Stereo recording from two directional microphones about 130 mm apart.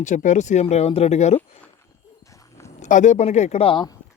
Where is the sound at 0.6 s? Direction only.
50° left (ahead or behind).